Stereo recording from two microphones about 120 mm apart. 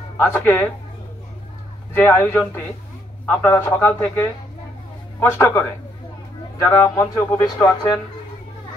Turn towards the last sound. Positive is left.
turn(degrees=20)  # may be behind; listen again after turning